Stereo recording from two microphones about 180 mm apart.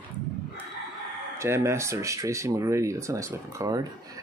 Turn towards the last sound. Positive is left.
turn(degrees=-15)  # may be behind; listen again after turning